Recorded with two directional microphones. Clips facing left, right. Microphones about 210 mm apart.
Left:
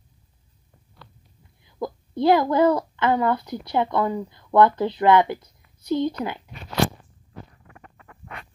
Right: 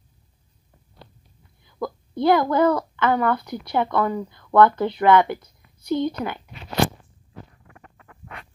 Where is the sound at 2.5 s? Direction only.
25° left (ahead or behind).